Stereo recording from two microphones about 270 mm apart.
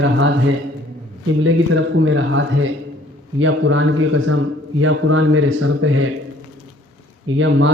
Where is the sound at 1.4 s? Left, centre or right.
Right.